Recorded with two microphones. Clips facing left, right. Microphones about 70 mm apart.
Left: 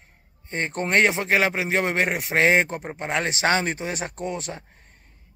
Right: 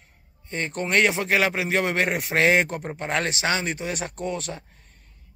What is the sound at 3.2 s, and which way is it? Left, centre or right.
Speech, left.